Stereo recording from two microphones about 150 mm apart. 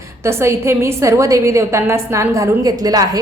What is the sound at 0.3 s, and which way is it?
A woman's voice, 15° right (ahead or behind).